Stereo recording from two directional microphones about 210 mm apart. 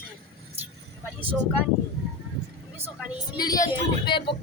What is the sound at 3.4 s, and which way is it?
Female singing, 15° left (ahead or behind).